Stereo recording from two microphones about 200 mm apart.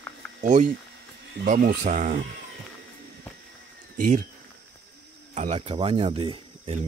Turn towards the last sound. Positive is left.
turn(degrees=-30)  # may be behind; listen again after turning